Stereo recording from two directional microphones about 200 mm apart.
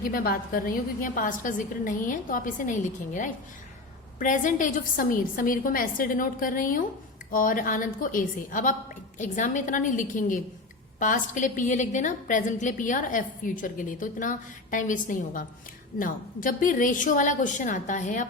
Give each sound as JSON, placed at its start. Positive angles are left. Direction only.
{"t": 0.1, "sound": "a woman's voice", "side_deg": 45}